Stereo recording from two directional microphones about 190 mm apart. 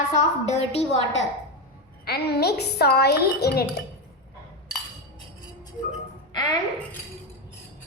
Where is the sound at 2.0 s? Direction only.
55° left (ahead or behind).